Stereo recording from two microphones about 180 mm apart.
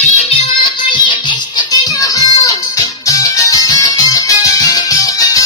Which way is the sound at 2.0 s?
20° left (ahead or behind).